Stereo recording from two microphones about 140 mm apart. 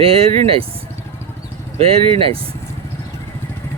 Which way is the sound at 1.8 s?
45° right (ahead or behind).